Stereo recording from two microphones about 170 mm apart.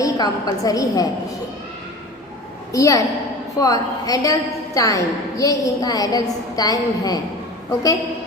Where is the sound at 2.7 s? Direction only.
20° left (ahead or behind).